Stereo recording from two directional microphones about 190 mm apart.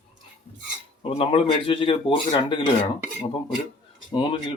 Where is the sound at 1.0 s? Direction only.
30° left (ahead or behind).